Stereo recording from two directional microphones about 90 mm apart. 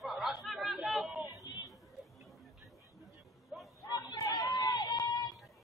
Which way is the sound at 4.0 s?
45° left (ahead or behind).